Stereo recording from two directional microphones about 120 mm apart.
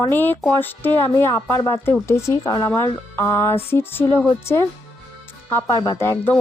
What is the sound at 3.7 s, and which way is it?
A woman's voice, 20° left (ahead or behind).